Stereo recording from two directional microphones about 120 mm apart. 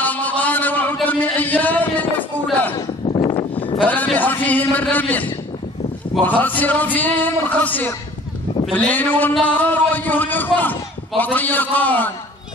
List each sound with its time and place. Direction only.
0.0 s a sound: 15° left (ahead or behind)
3.1 s vehicle: 40° left (ahead or behind)
3.8 s a man's voice: 15° left (ahead or behind)